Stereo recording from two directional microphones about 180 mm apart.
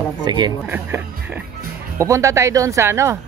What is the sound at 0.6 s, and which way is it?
Speech, 10° right (ahead or behind).